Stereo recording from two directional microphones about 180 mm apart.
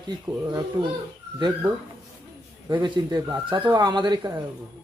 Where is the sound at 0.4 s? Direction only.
20° right (ahead or behind).